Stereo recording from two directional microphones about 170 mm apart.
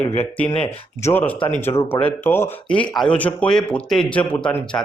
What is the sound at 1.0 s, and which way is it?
Speech, 10° left (ahead or behind).